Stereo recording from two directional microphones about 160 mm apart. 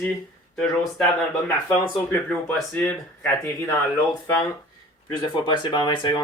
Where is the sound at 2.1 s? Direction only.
5° left (ahead or behind).